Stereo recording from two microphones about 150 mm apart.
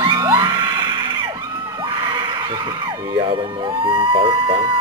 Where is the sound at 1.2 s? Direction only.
30° right (ahead or behind).